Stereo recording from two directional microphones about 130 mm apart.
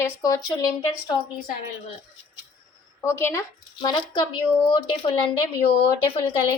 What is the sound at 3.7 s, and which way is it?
Speech, 35° left (ahead or behind).